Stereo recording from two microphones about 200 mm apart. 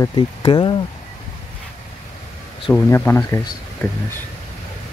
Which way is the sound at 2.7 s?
10° left (ahead or behind).